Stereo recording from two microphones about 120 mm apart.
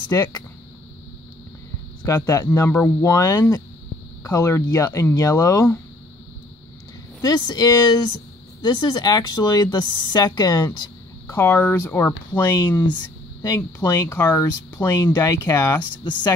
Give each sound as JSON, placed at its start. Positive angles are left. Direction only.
{"t": 0.1, "sound": "speech", "side_deg": 30}
{"t": 2.0, "sound": "speech", "side_deg": 25}
{"t": 7.2, "sound": "speech", "side_deg": 35}
{"t": 11.2, "sound": "speech", "side_deg": 20}
{"t": 12.8, "sound": "a sound", "side_deg": 35}
{"t": 13.6, "sound": "speech", "side_deg": 20}
{"t": 16.0, "sound": "speech", "side_deg": 40}